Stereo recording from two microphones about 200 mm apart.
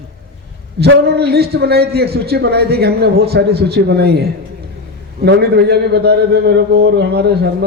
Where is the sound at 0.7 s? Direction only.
55° right (ahead or behind).